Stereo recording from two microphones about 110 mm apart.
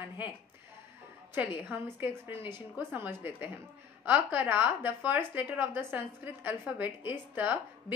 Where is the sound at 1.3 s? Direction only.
20° right (ahead or behind).